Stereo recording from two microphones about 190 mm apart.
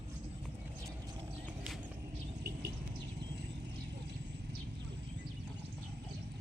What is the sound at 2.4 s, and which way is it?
Bird, 55° right (ahead or behind).